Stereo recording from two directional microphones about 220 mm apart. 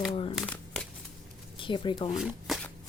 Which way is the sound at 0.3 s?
5° left (ahead or behind).